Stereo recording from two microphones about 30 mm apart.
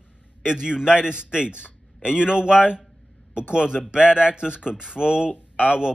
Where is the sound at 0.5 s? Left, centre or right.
Right.